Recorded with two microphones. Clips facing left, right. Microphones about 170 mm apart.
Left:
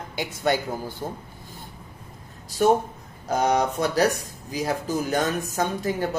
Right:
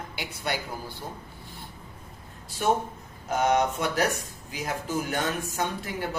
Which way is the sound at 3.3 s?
35° left (ahead or behind).